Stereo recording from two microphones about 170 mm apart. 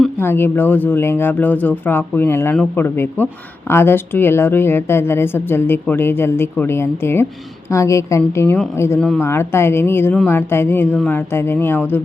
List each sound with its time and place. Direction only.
0.2 s a woman's voice: 15° left (ahead or behind)